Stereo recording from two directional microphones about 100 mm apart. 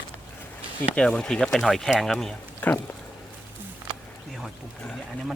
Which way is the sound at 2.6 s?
15° left (ahead or behind).